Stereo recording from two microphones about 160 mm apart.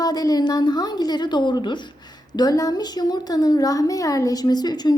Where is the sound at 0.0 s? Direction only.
25° left (ahead or behind).